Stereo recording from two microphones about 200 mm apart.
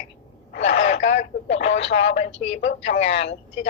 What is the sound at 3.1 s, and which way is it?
Speech, 60° left (ahead or behind).